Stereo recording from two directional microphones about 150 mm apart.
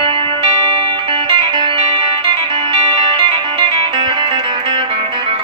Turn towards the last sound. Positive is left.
turn(degrees=-35)  # may be behind; listen again after turning